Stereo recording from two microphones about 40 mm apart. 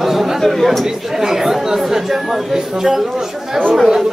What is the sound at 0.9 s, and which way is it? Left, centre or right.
A man's voice, centre.